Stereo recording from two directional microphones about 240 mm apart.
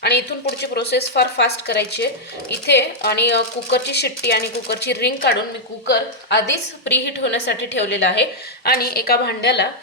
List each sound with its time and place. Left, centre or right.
0.0 s a woman's voice: left
6.3 s a woman's voice: left